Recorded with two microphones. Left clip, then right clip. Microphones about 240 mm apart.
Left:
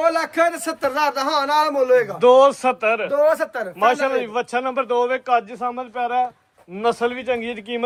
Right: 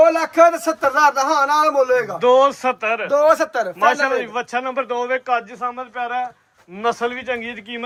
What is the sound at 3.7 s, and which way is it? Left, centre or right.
A man's voice, centre.